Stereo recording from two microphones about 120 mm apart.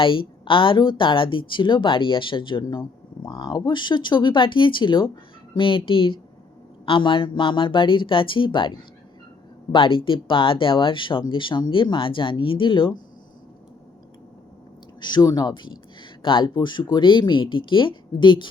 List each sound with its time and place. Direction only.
0.0 s speech: 45° left (ahead or behind)
9.7 s speech: 45° left (ahead or behind)
15.0 s speech: 35° left (ahead or behind)